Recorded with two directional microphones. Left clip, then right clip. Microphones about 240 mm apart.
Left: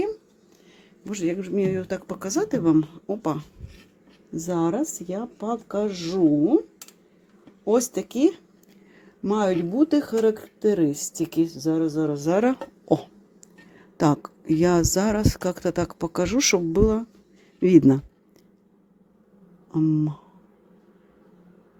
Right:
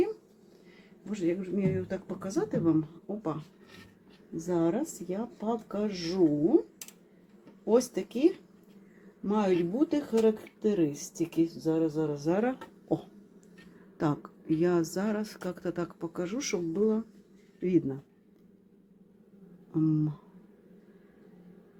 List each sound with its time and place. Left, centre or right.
1.1 s speech: left
4.4 s speech: left
7.6 s speech: left
19.7 s a sound: centre